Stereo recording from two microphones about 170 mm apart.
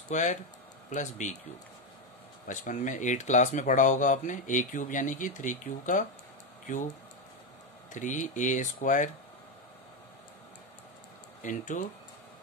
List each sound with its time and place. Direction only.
0.1 s speech: 45° left (ahead or behind)
2.4 s speech: 45° left (ahead or behind)
7.9 s speech: 50° left (ahead or behind)
11.4 s speech: 50° left (ahead or behind)